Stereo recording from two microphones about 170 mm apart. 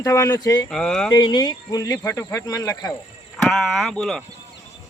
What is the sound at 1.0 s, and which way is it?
Speech, 25° left (ahead or behind).